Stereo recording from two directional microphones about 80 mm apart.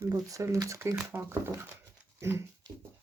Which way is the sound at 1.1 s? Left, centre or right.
Right.